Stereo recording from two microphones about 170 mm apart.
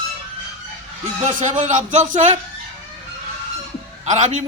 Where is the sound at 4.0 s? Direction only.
45° right (ahead or behind).